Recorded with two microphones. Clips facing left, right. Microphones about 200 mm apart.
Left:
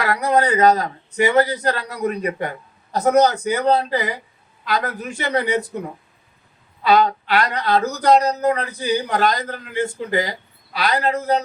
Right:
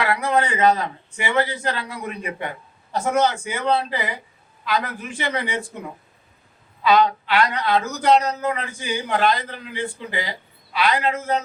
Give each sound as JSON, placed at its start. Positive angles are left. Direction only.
{"t": 0.0, "sound": "speech", "side_deg": 40}
{"t": 6.8, "sound": "speech", "side_deg": 40}